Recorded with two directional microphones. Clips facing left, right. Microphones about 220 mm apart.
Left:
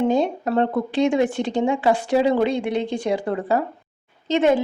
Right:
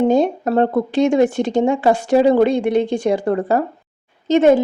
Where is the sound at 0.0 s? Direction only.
45° right (ahead or behind).